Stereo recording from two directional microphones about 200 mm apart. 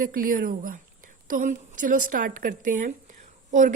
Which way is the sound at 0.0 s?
45° right (ahead or behind).